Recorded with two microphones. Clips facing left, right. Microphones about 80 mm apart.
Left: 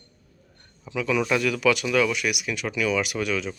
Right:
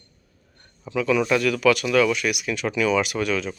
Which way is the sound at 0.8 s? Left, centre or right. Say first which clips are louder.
Right 3 dB; centre.